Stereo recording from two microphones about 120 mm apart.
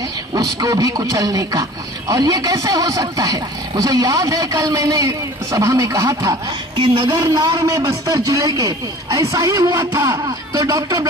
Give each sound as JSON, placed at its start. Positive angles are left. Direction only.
{"t": 0.3, "sound": "a man's voice", "side_deg": -30}
{"t": 6.8, "sound": "speech", "side_deg": -45}
{"t": 7.2, "sound": "a man's voice", "side_deg": -30}